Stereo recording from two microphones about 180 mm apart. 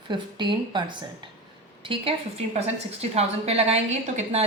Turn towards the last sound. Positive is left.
turn(degrees=-40)  # may be behind; listen again after turning